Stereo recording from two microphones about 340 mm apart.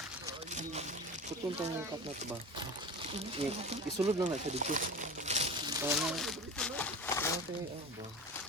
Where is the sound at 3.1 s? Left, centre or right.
Centre.